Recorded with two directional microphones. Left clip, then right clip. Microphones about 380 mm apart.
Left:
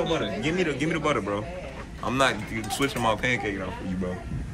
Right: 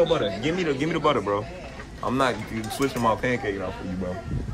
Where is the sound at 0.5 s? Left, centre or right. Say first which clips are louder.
Left 2 dB; right.